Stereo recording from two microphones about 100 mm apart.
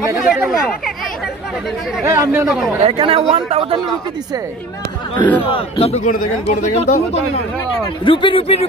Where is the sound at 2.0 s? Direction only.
30° right (ahead or behind).